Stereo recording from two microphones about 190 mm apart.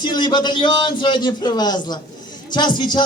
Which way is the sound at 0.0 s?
25° left (ahead or behind).